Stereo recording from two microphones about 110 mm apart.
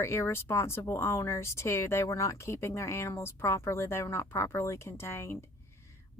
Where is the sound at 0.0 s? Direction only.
25° left (ahead or behind).